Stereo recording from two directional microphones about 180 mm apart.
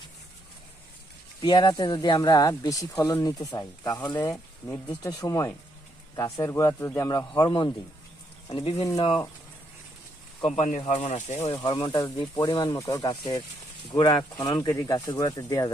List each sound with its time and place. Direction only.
1.4 s speech: 25° left (ahead or behind)
10.4 s speech: 35° left (ahead or behind)
11.5 s speech: 25° left (ahead or behind)